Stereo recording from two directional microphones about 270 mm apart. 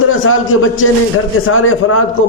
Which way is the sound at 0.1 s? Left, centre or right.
Left.